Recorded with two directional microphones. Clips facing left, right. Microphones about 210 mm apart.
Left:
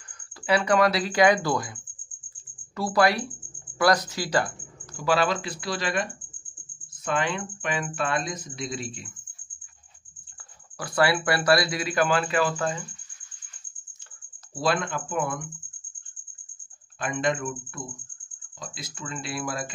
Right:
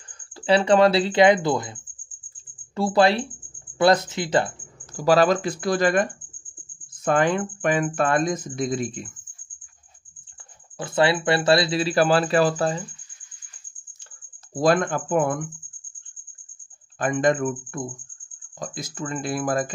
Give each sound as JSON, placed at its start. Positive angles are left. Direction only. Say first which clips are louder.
{"t": 0.4, "sound": "speech", "louder": "right 5 dB", "side_deg": -30}
{"t": 4.9, "sound": "speech", "louder": "right 6 dB", "side_deg": -40}
{"t": 7.1, "sound": "speech", "louder": "right 7 dB", "side_deg": -50}
{"t": 10.8, "sound": "speech", "louder": "right 3 dB", "side_deg": -25}
{"t": 14.5, "sound": "speech", "louder": "right 6 dB", "side_deg": -45}
{"t": 17.0, "sound": "speech", "louder": "right 6 dB", "side_deg": -45}